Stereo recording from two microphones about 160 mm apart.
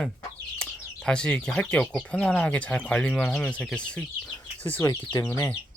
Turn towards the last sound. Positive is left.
turn(degrees=20)  # may be behind; listen again after turning